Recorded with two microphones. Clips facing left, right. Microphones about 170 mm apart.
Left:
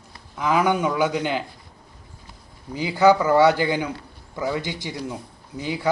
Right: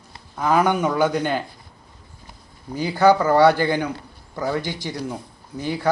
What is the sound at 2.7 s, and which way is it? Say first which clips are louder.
Speech: right 1 dB; 15° left (ahead or behind).